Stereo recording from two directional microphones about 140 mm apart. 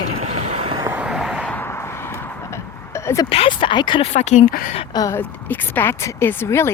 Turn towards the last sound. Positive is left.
turn(degrees=20)  # may be behind; listen again after turning